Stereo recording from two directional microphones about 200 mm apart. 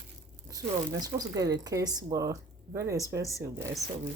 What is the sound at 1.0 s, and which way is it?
Speech, 20° right (ahead or behind).